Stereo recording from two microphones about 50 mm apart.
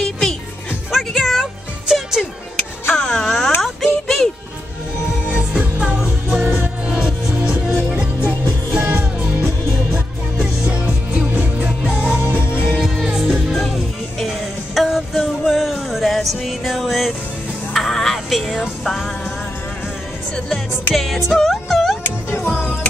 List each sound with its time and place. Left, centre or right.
0.0 s music: centre
2.9 s music: centre
3.6 s a sound: centre
5.3 s music: centre
7.9 s music: right
10.4 s music: right
12.2 s music: right
12.6 s music: centre
13.0 s music: centre
13.3 s music: centre
20.9 s music: centre
22.5 s music: centre